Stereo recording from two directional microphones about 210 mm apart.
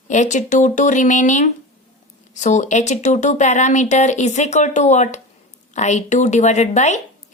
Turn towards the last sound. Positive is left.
turn(degrees=35)  # may be behind; listen again after turning